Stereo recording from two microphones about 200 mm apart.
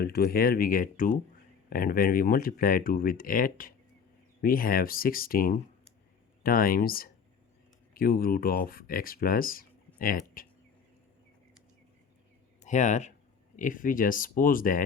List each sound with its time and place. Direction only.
0.0 s speech: 50° left (ahead or behind)
12.6 s speech: 35° left (ahead or behind)